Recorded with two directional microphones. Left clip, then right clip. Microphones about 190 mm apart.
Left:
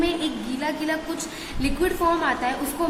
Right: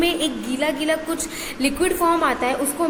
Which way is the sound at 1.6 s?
20° right (ahead or behind).